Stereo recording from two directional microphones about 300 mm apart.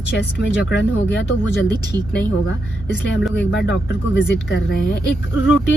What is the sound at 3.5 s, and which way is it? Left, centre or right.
Speech, left.